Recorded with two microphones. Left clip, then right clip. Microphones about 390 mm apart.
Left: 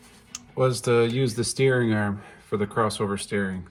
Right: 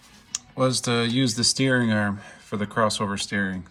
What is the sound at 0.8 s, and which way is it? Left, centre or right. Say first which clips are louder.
Speech: left 2 dB; centre.